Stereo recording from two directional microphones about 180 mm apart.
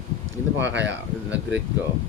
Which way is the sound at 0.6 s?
85° right.